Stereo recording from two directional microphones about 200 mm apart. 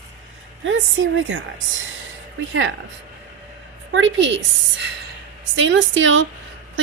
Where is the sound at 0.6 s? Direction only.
75° right (ahead or behind).